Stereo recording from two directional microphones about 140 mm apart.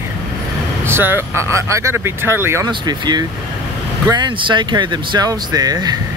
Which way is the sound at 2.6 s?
30° right (ahead or behind).